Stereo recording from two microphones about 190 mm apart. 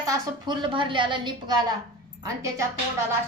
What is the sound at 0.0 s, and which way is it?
A woman's voice, 20° right (ahead or behind).